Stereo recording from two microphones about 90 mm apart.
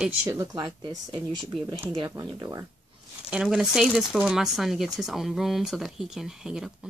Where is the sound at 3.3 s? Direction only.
5° right (ahead or behind).